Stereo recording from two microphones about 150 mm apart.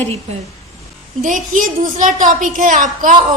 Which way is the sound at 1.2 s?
60° right (ahead or behind).